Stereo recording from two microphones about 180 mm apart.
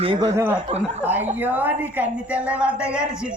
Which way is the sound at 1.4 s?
10° right (ahead or behind).